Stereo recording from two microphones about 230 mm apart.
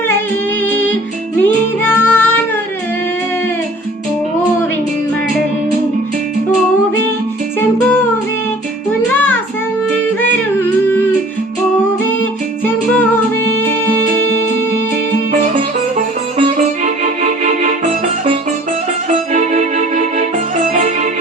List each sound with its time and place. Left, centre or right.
1.4 s music: centre
9.1 s child singing: centre
10.2 s music: centre
16.6 s music: right
19.3 s music: right